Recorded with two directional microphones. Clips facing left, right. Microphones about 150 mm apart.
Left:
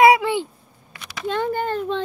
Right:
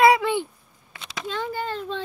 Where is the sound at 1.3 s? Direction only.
55° left (ahead or behind).